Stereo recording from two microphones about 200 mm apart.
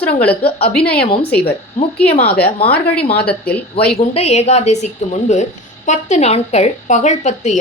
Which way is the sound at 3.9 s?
30° left (ahead or behind).